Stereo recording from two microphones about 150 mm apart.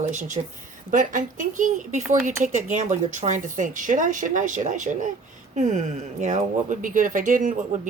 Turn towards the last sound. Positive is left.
turn(degrees=-60)  # may be behind; listen again after turning